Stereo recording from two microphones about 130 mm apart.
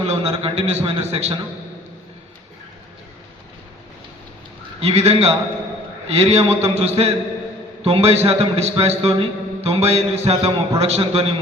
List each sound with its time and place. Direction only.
0.0 s a man's voice: 50° right (ahead or behind)
4.8 s a man's voice: 50° right (ahead or behind)